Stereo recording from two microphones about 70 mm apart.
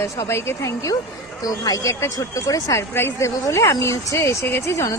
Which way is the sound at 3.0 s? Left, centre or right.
Left.